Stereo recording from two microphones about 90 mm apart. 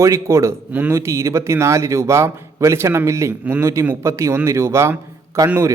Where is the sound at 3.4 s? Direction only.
20° right (ahead or behind).